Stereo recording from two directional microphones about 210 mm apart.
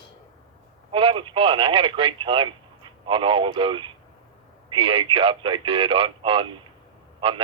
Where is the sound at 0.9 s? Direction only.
25° right (ahead or behind).